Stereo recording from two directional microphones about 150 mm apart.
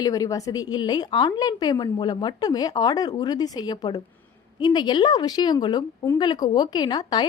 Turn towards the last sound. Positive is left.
turn(degrees=25)  # may be behind; listen again after turning